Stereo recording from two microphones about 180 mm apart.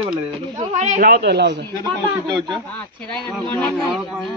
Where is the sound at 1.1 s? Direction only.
70° right (ahead or behind).